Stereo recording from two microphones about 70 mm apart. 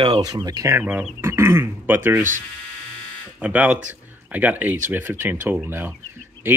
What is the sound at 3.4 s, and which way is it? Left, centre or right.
Speech, centre.